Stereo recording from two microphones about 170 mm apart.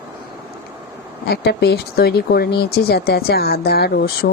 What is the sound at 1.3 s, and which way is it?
Speech, 70° left (ahead or behind).